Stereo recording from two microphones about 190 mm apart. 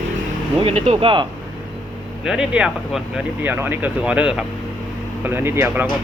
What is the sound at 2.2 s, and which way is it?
Speech, 5° right (ahead or behind).